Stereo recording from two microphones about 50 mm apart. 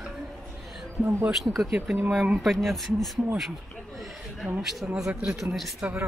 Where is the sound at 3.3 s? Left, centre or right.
Centre.